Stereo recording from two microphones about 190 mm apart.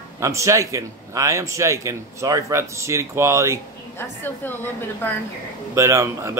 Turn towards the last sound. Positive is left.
turn(degrees=-15)  # may be behind; listen again after turning